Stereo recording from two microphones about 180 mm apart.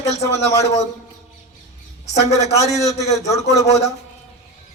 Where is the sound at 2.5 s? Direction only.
15° left (ahead or behind).